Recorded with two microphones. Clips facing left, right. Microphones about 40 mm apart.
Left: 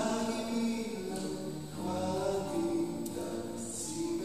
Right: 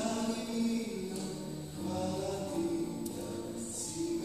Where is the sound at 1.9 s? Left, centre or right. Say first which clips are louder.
Left 2 dB; centre.